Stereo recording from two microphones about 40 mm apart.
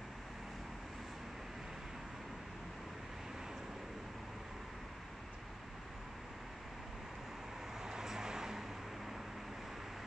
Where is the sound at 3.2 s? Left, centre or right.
Centre.